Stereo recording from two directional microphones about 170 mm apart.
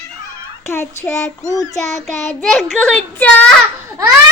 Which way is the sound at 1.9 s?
Centre (ahead or behind).